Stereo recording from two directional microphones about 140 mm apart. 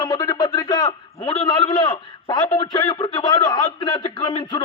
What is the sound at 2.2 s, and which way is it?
A man's voice, 30° left (ahead or behind).